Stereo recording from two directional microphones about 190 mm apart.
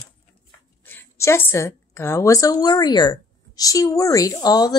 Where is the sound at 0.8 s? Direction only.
10° left (ahead or behind).